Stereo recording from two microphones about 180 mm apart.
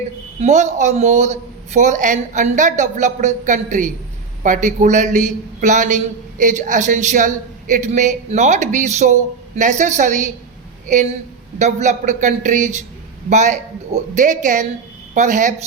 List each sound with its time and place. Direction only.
0.3 s a man's voice: 40° right (ahead or behind)
11.6 s a man's voice: 40° right (ahead or behind)